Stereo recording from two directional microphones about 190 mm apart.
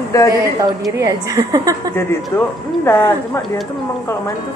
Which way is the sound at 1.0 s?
15° right (ahead or behind).